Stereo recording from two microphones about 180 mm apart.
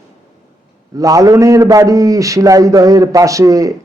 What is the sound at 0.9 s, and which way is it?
A man's voice, 20° right (ahead or behind).